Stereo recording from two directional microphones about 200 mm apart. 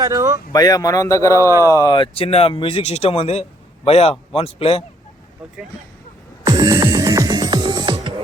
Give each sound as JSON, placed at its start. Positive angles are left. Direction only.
{"t": 0.0, "sound": "speech", "side_deg": -15}
{"t": 0.5, "sound": "a man's voice", "side_deg": 20}
{"t": 6.4, "sound": "music", "side_deg": -20}